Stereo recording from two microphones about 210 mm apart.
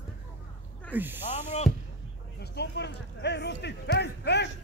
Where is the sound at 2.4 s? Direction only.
50° left (ahead or behind).